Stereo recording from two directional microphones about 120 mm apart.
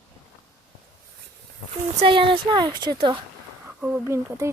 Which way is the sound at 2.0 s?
45° right (ahead or behind).